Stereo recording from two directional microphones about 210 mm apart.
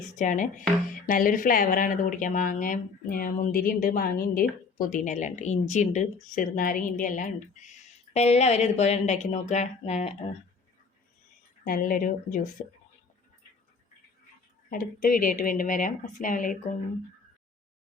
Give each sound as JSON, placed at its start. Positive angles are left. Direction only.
{"t": 0.2, "sound": "speech", "side_deg": 35}
{"t": 11.6, "sound": "speech", "side_deg": 40}
{"t": 14.7, "sound": "speech", "side_deg": 40}